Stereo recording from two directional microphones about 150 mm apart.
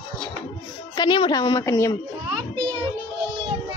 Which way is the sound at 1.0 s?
30° left (ahead or behind).